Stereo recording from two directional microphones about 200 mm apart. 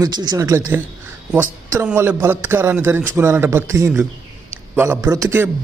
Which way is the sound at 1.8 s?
10° right (ahead or behind).